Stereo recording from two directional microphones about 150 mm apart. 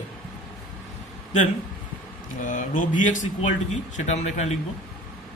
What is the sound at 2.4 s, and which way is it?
Speech, 60° left (ahead or behind).